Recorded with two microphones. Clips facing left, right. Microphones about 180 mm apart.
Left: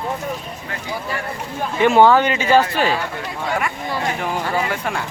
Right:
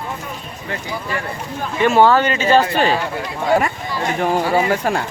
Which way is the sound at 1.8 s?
15° left (ahead or behind).